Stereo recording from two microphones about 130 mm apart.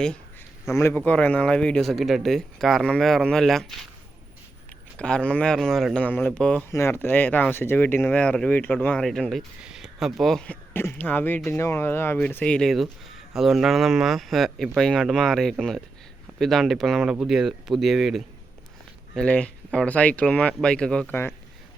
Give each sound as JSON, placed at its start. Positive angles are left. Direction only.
{"t": 0.7, "sound": "a man's voice", "side_deg": 20}
{"t": 4.9, "sound": "speech", "side_deg": 10}
{"t": 6.7, "sound": "a man's voice", "side_deg": 20}
{"t": 19.1, "sound": "speech", "side_deg": 10}
{"t": 21.1, "sound": "speech", "side_deg": 15}